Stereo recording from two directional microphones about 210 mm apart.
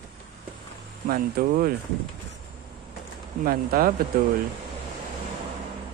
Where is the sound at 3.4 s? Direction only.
45° right (ahead or behind).